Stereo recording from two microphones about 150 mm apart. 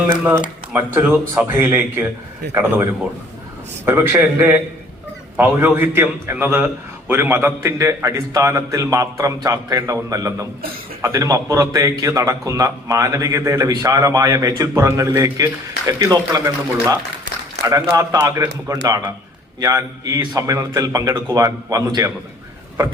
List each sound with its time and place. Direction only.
0.7 s a man's voice: 15° right (ahead or behind)
3.8 s a man's voice: 15° right (ahead or behind)